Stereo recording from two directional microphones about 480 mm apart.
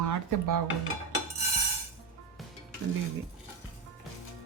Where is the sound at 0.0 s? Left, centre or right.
Right.